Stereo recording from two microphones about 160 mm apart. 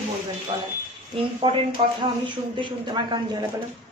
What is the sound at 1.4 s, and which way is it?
A woman's voice, 35° right (ahead or behind).